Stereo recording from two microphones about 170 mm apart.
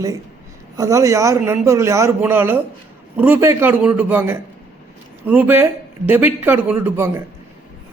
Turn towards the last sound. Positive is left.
turn(degrees=-15)  # may be behind; listen again after turning